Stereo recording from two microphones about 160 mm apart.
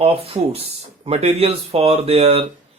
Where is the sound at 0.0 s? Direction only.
35° right (ahead or behind).